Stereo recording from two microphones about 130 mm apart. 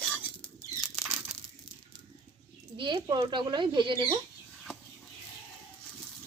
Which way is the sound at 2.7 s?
40° right (ahead or behind).